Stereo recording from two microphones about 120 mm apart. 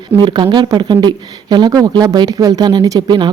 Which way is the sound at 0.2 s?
40° right (ahead or behind).